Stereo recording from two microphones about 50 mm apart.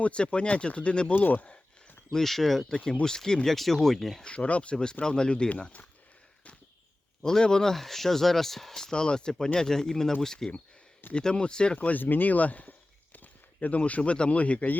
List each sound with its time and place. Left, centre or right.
0.0 s speech: left
1.1 s speech: left
2.1 s speech: centre
4.2 s speech: left
7.2 s speech: centre
11.8 s speech: left